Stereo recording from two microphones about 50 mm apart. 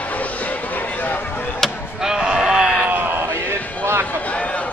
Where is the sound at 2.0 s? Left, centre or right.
Centre.